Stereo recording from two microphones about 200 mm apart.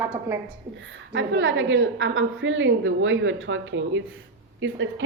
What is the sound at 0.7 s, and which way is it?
A woman's voice, 70° right (ahead or behind).